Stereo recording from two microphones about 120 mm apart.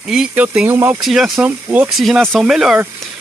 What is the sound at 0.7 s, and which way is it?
Speech, 20° right (ahead or behind).